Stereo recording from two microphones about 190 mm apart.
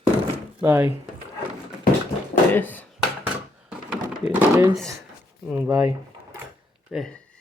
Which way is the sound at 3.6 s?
5° right (ahead or behind).